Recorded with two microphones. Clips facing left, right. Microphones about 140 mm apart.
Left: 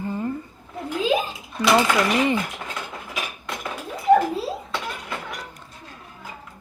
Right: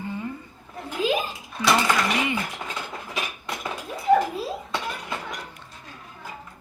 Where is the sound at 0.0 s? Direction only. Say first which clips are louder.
Left 4 dB; 45° left (ahead or behind).